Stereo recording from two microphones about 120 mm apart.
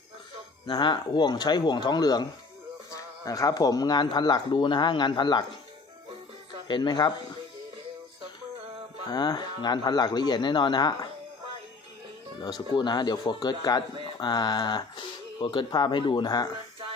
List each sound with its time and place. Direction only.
0.7 s speech: 35° left (ahead or behind)
6.7 s speech: 35° left (ahead or behind)
9.0 s speech: 35° left (ahead or behind)
12.4 s speech: 35° left (ahead or behind)